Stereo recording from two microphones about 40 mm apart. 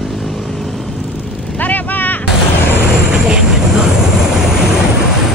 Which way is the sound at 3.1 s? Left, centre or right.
Centre.